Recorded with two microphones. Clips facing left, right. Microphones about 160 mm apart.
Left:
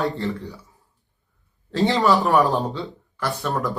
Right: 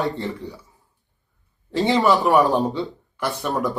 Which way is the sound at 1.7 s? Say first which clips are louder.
Right 1 dB; 20° right (ahead or behind).